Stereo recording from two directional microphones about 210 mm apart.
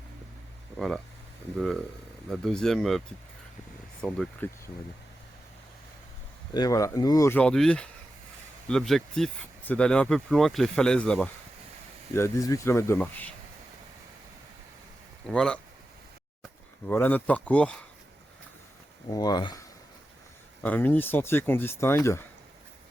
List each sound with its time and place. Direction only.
0.8 s speech: centre (ahead or behind)
4.0 s speech: 5° left (ahead or behind)
6.5 s speech: 15° left (ahead or behind)
15.3 s speech: 5° left (ahead or behind)
16.8 s speech: 10° left (ahead or behind)
19.1 s speech: 20° left (ahead or behind)
20.6 s speech: 10° left (ahead or behind)